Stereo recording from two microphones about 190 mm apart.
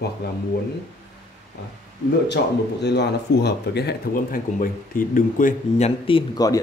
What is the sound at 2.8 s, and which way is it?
Speech, 60° left (ahead or behind).